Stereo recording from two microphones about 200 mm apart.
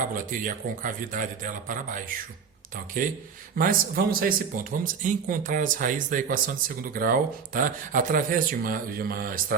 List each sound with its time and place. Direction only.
0.0 s speech: 45° right (ahead or behind)